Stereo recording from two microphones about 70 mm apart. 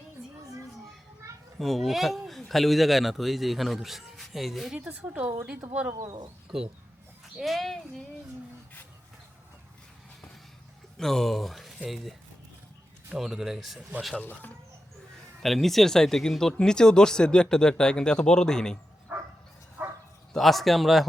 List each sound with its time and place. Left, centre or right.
1.5 s speech: centre
4.7 s a woman's voice: centre
5.0 s a woman's voice: right
5.9 s speech: right
6.5 s a woman's voice: centre
10.9 s speech: centre
13.1 s speech: centre
14.2 s speech: left
15.4 s speech: centre
20.3 s speech: centre